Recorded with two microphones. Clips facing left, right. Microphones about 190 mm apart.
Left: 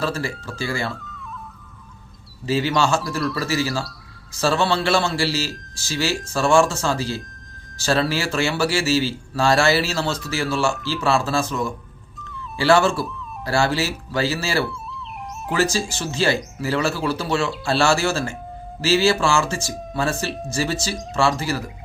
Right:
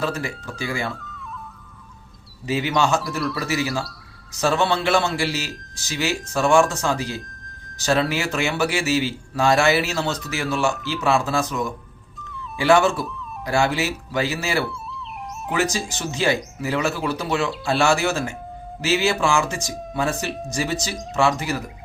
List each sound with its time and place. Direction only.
0.0 s a man's voice: 20° right (ahead or behind)
0.9 s music: centre (ahead or behind)
2.5 s a man's voice: 20° right (ahead or behind)
3.2 s a man's voice: centre (ahead or behind)
3.4 s a man's voice: 20° right (ahead or behind)
15.5 s a man's voice: 20° right (ahead or behind)